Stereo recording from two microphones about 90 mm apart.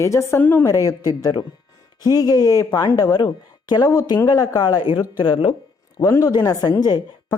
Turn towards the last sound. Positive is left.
turn(degrees=45)  # may be behind; listen again after turning